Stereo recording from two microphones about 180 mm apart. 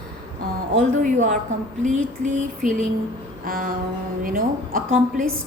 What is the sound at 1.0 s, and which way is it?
A woman's voice, 45° right (ahead or behind).